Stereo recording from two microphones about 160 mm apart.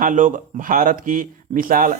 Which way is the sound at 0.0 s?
55° right (ahead or behind).